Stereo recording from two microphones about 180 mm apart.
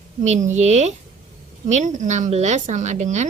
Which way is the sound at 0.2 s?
40° right (ahead or behind).